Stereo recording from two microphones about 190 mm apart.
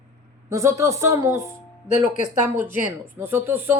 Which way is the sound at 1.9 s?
40° left (ahead or behind).